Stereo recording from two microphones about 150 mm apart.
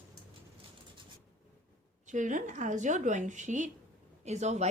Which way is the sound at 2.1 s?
60° right (ahead or behind).